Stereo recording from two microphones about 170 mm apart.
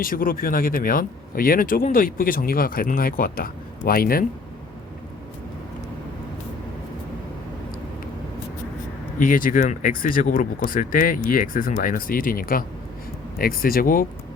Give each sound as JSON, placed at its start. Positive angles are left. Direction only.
{"t": 0.0, "sound": "speech", "side_deg": 55}
{"t": 9.1, "sound": "speech", "side_deg": 55}